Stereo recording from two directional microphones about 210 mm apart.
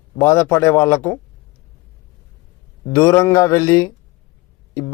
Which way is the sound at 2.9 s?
15° left (ahead or behind).